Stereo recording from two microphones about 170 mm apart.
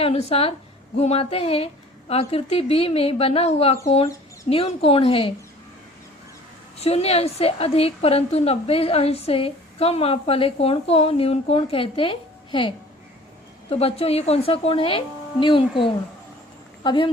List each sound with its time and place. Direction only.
0.0 s a woman's voice: 40° left (ahead or behind)
6.7 s a woman's voice: 35° left (ahead or behind)